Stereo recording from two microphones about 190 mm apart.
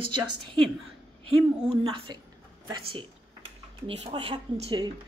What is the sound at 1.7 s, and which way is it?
Speech, 25° right (ahead or behind).